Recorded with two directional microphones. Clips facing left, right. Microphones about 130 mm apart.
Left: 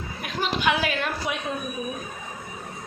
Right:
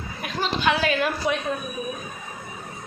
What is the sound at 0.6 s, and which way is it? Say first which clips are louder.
Speech: right 4 dB; 10° left (ahead or behind).